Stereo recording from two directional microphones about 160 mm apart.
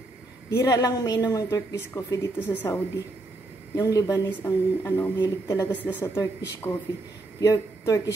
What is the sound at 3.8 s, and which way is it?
A woman's voice, 20° left (ahead or behind).